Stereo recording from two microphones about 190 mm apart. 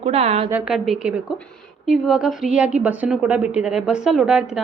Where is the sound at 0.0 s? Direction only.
35° right (ahead or behind).